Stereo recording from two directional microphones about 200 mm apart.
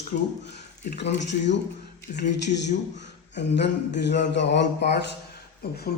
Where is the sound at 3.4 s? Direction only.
60° left (ahead or behind).